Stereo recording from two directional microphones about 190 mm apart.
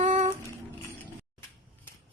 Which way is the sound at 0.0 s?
40° right (ahead or behind).